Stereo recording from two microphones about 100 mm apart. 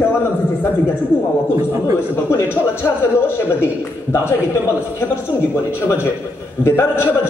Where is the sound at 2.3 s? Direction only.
25° left (ahead or behind).